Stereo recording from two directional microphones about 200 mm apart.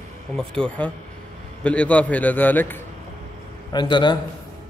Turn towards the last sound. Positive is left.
turn(degrees=20)  # may be behind; listen again after turning